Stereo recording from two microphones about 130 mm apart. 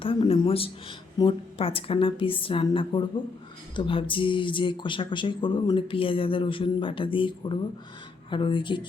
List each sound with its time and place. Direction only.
0.0 s a woman's voice: 45° left (ahead or behind)